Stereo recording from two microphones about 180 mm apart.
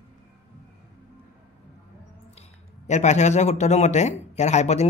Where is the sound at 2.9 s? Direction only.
40° left (ahead or behind).